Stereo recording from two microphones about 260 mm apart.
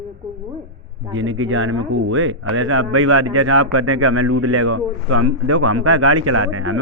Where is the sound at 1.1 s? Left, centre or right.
Right.